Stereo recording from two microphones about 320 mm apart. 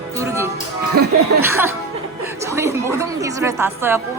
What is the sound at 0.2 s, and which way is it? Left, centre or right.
Music, centre.